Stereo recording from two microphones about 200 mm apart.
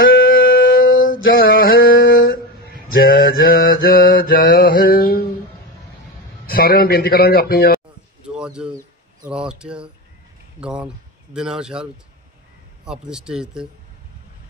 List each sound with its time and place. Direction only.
0.3 s a sound: 45° left (ahead or behind)
1.4 s mantra: 45° left (ahead or behind)
1.9 s a sound: 75° left (ahead or behind)
3.0 s mantra: 45° left (ahead or behind)
3.6 s music: 45° left (ahead or behind)
6.4 s speech: 50° left (ahead or behind)
8.4 s speech: 5° right (ahead or behind)